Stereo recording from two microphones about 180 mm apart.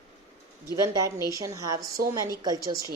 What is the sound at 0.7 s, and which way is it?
A woman's voice, 20° right (ahead or behind).